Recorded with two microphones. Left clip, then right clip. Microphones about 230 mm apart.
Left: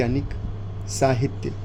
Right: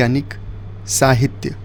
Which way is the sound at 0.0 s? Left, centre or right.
Right.